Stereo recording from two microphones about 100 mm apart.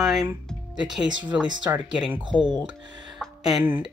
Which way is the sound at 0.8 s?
45° right (ahead or behind).